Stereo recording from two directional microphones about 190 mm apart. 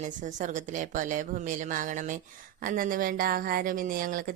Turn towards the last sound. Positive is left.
turn(degrees=-45)  # may be behind; listen again after turning